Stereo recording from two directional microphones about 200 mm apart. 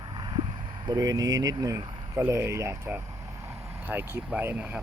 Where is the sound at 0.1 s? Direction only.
20° right (ahead or behind).